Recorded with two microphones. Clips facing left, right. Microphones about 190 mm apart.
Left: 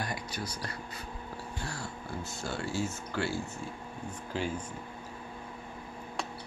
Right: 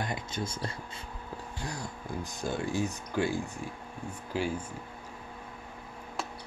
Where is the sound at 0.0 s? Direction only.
25° right (ahead or behind).